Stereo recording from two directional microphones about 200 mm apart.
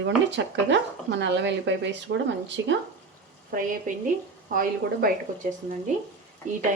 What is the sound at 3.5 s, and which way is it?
Speech, 45° right (ahead or behind).